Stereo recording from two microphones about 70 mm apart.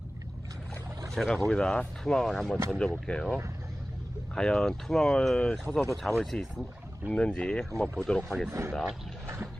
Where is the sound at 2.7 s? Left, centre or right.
Centre.